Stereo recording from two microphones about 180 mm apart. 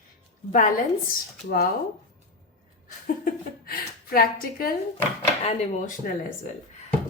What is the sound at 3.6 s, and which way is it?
A woman's voice, 55° left (ahead or behind).